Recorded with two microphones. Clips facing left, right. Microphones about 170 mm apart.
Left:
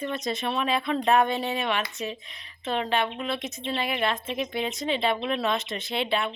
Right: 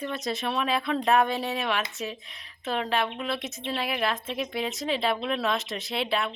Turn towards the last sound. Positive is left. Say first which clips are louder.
# left 1 dB
turn(degrees=0)  # may be behind; listen again after turning